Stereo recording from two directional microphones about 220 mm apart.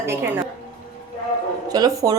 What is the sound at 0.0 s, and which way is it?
Speech, 10° right (ahead or behind).